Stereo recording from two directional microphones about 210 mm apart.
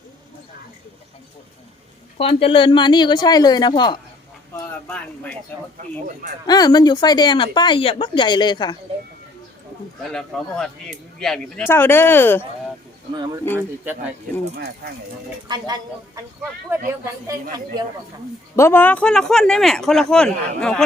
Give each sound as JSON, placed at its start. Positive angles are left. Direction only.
{"t": 2.1, "sound": "speech", "side_deg": 25}
{"t": 4.5, "sound": "speech", "side_deg": 5}
{"t": 6.5, "sound": "speech", "side_deg": 20}
{"t": 10.0, "sound": "speech", "side_deg": 0}
{"t": 13.1, "sound": "speech", "side_deg": -15}
{"t": 15.4, "sound": "speech", "side_deg": -20}
{"t": 18.5, "sound": "speech", "side_deg": 10}